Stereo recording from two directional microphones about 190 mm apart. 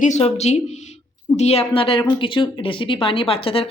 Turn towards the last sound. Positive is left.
turn(degrees=30)  # may be behind; listen again after turning